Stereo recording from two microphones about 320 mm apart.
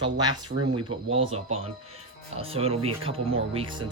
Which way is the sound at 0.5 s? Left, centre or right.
Right.